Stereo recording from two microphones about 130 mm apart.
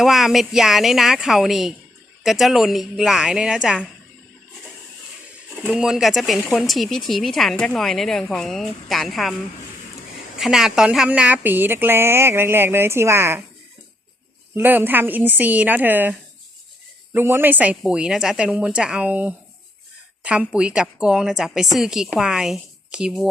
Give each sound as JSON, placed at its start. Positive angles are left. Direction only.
{"t": 0.0, "sound": "speech", "side_deg": 0}
{"t": 5.5, "sound": "speech", "side_deg": -5}
{"t": 10.3, "sound": "speech", "side_deg": -5}
{"t": 14.5, "sound": "speech", "side_deg": -15}